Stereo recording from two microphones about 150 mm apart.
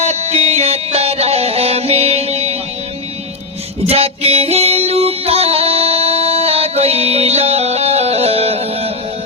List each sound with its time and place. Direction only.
0.0 s music: 45° right (ahead or behind)
3.8 s music: 40° right (ahead or behind)